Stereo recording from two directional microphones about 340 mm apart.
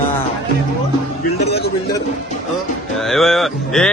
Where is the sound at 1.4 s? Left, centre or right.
Left.